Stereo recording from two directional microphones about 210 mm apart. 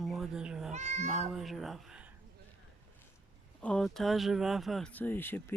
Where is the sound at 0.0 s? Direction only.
Centre (ahead or behind).